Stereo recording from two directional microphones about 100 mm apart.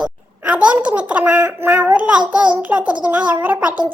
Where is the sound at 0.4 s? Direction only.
10° right (ahead or behind).